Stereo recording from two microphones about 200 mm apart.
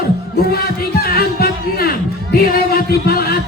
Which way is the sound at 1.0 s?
50° left (ahead or behind).